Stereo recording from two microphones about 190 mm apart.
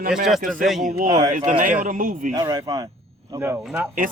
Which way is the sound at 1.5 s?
45° right (ahead or behind).